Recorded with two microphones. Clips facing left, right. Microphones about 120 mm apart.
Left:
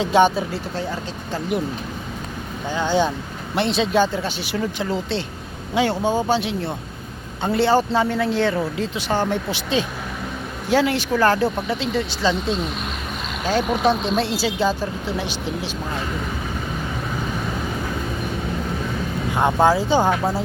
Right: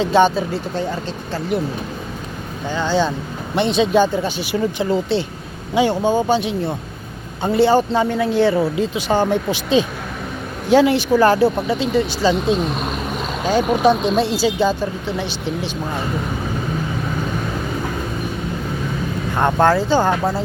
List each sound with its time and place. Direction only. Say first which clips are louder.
0.0 s speech: right 2 dB; 10° left (ahead or behind)
2.7 s speech: right 1 dB; 15° left (ahead or behind)
3.5 s speech: right 4 dB; centre (ahead or behind)
13.4 s speech: right 4 dB; centre (ahead or behind)
19.4 s speech: right 2 dB; 5° left (ahead or behind)